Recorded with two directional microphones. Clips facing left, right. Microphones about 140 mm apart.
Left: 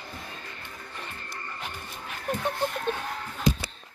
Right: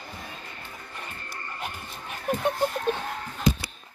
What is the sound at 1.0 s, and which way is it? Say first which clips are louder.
Frog: even; 10° right (ahead or behind).